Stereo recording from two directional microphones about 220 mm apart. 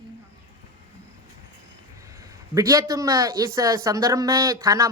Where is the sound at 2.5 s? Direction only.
15° right (ahead or behind).